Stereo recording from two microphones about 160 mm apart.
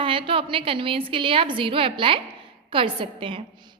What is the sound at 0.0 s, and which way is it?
A woman's voice, 35° right (ahead or behind).